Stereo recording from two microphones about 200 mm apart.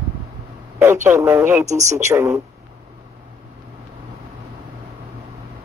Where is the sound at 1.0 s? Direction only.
10° right (ahead or behind).